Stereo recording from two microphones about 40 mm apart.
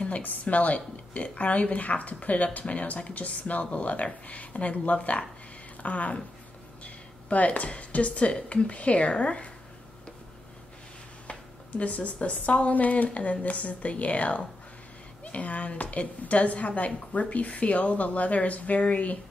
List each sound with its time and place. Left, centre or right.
0.0 s a woman's voice: left
11.8 s a woman's voice: left